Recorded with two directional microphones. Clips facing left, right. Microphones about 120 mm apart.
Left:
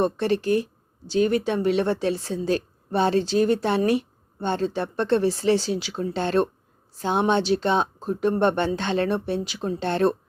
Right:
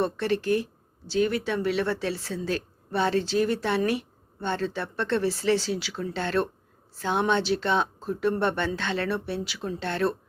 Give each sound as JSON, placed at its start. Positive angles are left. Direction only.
{"t": 0.0, "sound": "speech", "side_deg": 20}